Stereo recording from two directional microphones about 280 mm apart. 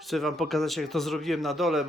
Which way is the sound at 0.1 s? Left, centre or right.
Centre.